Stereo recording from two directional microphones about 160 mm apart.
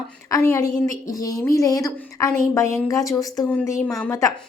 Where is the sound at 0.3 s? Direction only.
20° left (ahead or behind).